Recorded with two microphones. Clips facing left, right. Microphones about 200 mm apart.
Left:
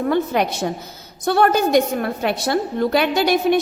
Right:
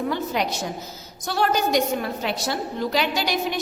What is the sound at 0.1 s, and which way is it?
A woman's voice, 55° left (ahead or behind).